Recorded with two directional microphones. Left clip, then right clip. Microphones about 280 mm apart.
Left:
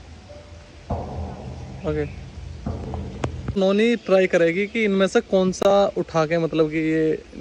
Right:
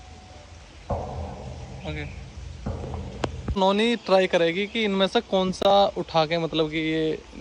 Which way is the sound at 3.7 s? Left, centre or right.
Centre.